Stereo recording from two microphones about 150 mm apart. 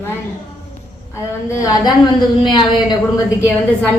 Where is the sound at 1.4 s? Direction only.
20° left (ahead or behind).